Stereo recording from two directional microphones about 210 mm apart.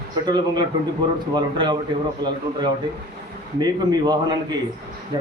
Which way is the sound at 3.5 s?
20° right (ahead or behind).